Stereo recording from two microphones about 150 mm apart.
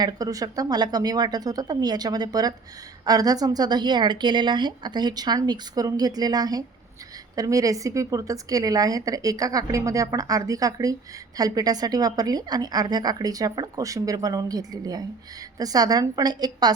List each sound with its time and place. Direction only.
0.0 s a woman's voice: 25° right (ahead or behind)